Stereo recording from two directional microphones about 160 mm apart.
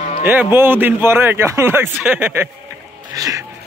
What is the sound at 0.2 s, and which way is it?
A man's voice, 15° right (ahead or behind).